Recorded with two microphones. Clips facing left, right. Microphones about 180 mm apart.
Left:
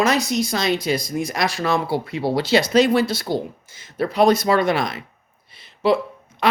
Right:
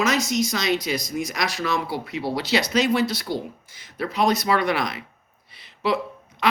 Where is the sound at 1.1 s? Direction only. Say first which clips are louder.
Left 3 dB; 55° left (ahead or behind).